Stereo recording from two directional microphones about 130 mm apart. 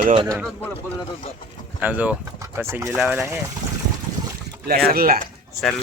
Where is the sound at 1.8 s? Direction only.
10° right (ahead or behind).